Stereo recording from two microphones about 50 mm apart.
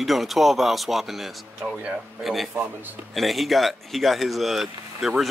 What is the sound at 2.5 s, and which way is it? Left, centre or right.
Speech, right.